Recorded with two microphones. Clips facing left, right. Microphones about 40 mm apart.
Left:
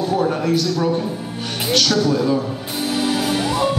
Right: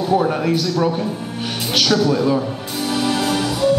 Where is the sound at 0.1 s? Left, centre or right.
Centre.